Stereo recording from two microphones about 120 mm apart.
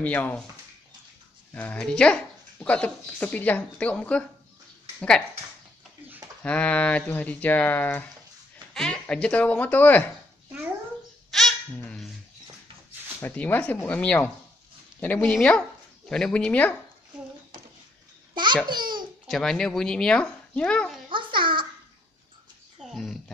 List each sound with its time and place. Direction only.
0.0 s speech: 15° left (ahead or behind)
1.5 s speech: 10° left (ahead or behind)
6.4 s speech: 10° left (ahead or behind)
11.2 s babbling: 5° left (ahead or behind)
13.2 s speech: 15° left (ahead or behind)
18.3 s babbling: 40° right (ahead or behind)
19.2 s speech: 5° left (ahead or behind)
21.1 s babbling: 45° right (ahead or behind)
22.8 s pig: centre (ahead or behind)